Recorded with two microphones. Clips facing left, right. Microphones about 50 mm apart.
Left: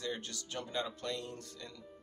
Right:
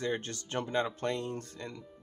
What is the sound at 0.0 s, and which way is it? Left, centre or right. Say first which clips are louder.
Speech: right 6 dB; right.